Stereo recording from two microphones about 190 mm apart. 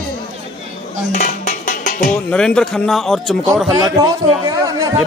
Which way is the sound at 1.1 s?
40° left (ahead or behind).